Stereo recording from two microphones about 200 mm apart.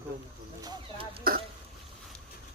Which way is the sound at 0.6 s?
25° right (ahead or behind).